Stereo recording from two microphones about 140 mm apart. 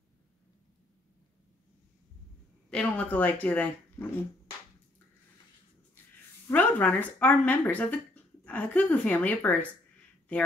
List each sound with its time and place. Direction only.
2.7 s speech: 10° left (ahead or behind)
6.4 s speech: 15° left (ahead or behind)